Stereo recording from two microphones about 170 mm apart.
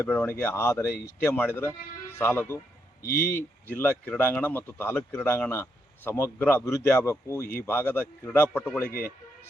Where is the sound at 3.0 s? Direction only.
60° left (ahead or behind).